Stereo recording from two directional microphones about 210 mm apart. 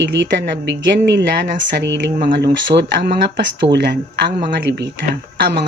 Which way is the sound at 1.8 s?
55° right (ahead or behind).